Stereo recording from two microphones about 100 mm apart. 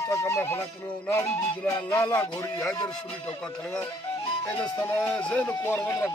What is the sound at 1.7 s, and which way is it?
Music, 30° left (ahead or behind).